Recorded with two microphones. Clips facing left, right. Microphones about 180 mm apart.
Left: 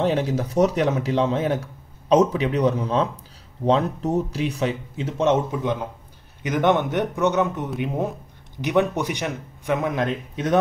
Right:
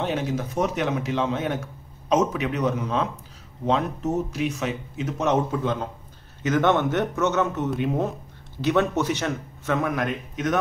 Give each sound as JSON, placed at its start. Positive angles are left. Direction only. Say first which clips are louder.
{"t": 0.0, "sound": "a man's voice", "louder": "left 4 dB", "side_deg": 35}